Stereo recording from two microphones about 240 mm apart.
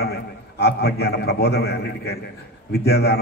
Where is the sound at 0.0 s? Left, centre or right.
Left.